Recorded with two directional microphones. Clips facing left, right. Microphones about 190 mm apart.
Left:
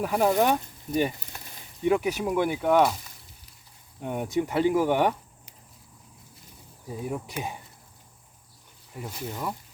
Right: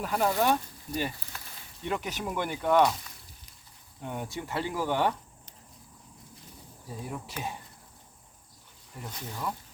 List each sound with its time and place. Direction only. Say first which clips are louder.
0.0 s speech: left 4 dB; 15° left (ahead or behind)
4.0 s speech: left 9 dB; 15° left (ahead or behind)
6.8 s speech: left 6 dB; 15° left (ahead or behind)
9.0 s speech: left 4 dB; 10° left (ahead or behind)